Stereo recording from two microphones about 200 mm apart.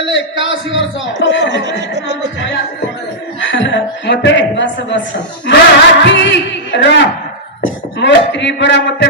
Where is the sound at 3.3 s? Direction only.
65° left (ahead or behind).